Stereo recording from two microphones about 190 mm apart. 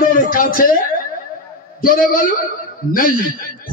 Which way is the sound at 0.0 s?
50° left (ahead or behind).